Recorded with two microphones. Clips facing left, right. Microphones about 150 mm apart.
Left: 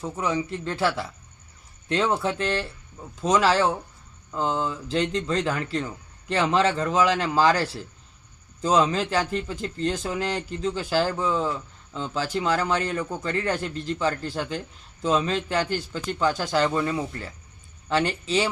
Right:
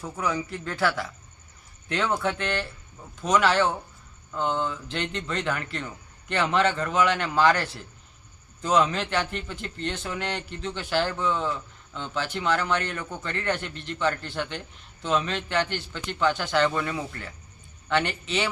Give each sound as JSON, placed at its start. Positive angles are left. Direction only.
{"t": 0.0, "sound": "speech", "side_deg": 25}